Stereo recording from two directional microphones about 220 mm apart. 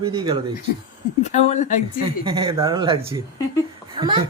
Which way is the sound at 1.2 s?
30° left (ahead or behind).